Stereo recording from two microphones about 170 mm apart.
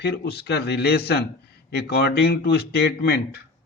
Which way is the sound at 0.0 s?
70° left (ahead or behind).